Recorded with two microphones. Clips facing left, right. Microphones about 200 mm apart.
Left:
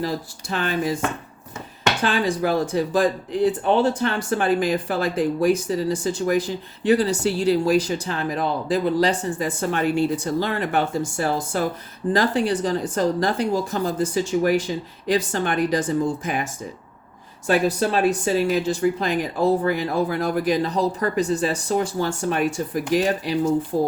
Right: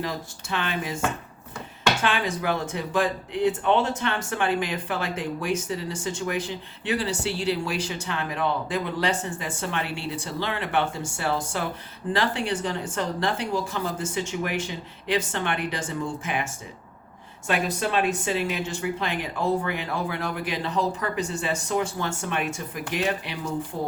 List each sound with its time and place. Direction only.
0.0 s speech: 35° left (ahead or behind)
2.0 s speech: 35° left (ahead or behind)